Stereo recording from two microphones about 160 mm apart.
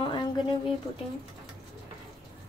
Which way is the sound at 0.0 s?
30° left (ahead or behind).